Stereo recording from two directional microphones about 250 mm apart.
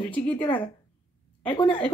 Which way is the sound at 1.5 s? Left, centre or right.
Centre.